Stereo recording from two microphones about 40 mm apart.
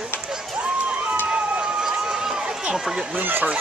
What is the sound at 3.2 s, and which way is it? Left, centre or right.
Speech, right.